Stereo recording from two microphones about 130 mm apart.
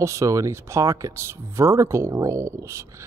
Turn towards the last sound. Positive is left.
turn(degrees=-20)  # may be behind; listen again after turning